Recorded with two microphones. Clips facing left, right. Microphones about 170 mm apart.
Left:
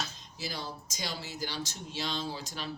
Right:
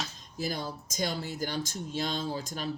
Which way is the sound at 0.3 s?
50° right (ahead or behind).